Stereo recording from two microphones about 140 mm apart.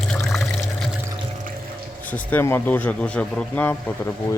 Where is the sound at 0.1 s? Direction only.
5° left (ahead or behind).